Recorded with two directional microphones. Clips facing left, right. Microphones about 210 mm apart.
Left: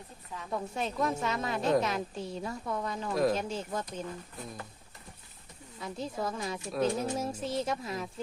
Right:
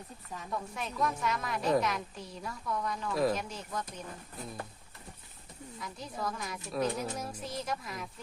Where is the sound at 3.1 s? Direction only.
Centre (ahead or behind).